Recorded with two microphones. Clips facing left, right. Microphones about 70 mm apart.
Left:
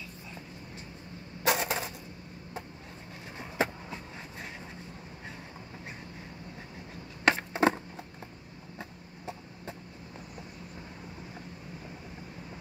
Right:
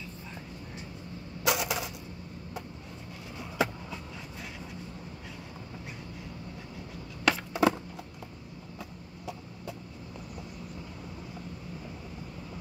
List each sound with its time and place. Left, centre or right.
1.4 s coin: left
3.3 s vehicle: left
7.2 s a sound: left